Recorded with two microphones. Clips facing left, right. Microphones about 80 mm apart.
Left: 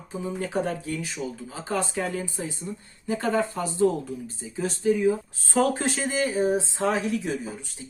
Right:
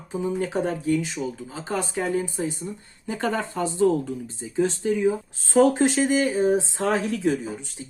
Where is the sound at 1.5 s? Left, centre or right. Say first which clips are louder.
Left 2 dB; right.